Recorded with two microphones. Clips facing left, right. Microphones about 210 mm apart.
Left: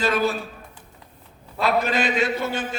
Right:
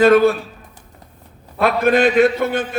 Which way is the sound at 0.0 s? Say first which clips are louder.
Right 11 dB; 55° right (ahead or behind).